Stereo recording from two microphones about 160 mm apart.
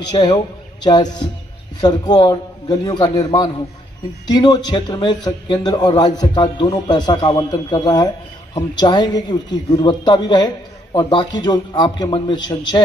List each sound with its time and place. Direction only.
0.1 s a man's voice: 25° left (ahead or behind)